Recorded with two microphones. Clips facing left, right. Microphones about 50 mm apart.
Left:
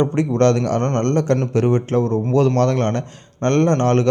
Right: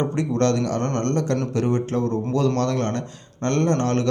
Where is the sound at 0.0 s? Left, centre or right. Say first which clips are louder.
Left 5 dB; left.